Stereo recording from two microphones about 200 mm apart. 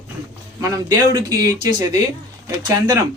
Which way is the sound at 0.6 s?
15° right (ahead or behind).